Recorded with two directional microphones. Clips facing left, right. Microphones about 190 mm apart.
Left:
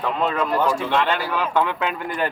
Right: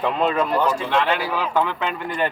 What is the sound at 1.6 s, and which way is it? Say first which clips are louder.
Speech: left 1 dB; 5° left (ahead or behind).